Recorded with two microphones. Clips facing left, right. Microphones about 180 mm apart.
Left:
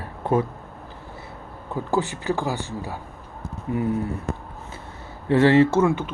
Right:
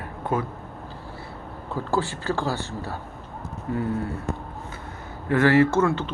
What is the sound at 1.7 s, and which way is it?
Speech, 15° left (ahead or behind).